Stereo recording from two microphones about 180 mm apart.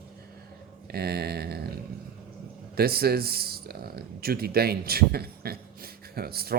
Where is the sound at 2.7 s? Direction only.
60° right (ahead or behind).